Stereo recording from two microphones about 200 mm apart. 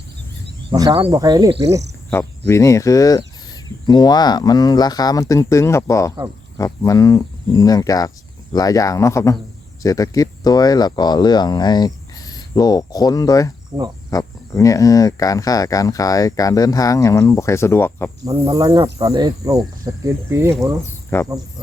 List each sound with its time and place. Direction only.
0.7 s speech: 25° right (ahead or behind)
2.5 s speech: 15° left (ahead or behind)
18.3 s speech: 15° right (ahead or behind)
21.1 s speech: 15° left (ahead or behind)